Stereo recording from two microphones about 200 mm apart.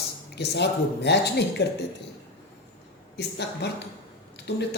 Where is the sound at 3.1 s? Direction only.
55° left (ahead or behind).